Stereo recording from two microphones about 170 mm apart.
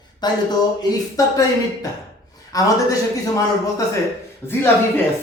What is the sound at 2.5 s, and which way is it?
Speech, 20° left (ahead or behind).